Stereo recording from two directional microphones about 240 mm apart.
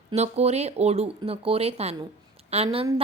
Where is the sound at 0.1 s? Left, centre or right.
Right.